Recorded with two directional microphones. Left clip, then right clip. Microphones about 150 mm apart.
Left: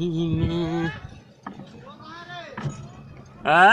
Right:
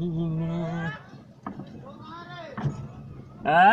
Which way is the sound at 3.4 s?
25° left (ahead or behind).